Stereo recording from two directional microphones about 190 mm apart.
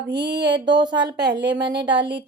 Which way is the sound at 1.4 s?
70° right (ahead or behind).